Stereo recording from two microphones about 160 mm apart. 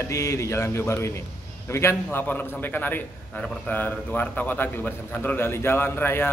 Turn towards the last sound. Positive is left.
turn(degrees=15)  # may be behind; listen again after turning